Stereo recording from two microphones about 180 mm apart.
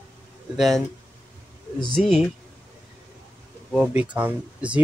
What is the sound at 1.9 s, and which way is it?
Speech, centre (ahead or behind).